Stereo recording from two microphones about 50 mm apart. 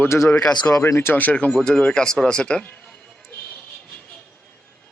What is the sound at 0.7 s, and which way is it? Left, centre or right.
Speech, left.